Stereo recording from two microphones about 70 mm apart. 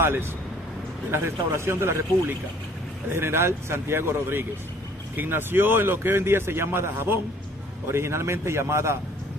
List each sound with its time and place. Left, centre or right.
0.0 s a man's voice: right